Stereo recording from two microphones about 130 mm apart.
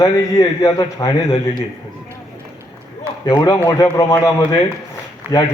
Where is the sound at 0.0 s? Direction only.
30° left (ahead or behind).